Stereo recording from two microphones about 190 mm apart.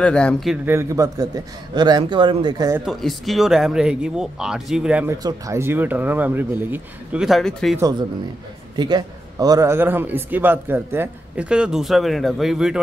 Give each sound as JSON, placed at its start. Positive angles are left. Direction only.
{"t": 0.0, "sound": "speech", "side_deg": 5}
{"t": 0.7, "sound": "a man's voice", "side_deg": -15}
{"t": 2.8, "sound": "a man's voice", "side_deg": 0}
{"t": 8.7, "sound": "a man's voice", "side_deg": -20}